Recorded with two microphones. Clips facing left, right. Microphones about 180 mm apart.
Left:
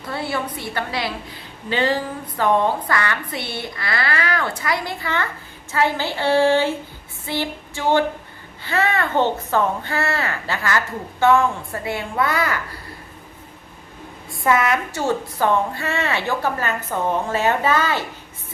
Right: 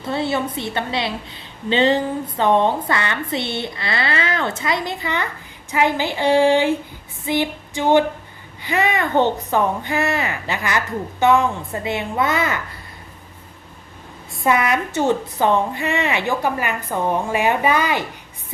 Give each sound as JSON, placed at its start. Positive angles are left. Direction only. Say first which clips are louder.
{"t": 0.0, "sound": "a woman's voice", "louder": "right 4 dB", "side_deg": -25}
{"t": 14.4, "sound": "a child's voice", "louder": "even", "side_deg": -20}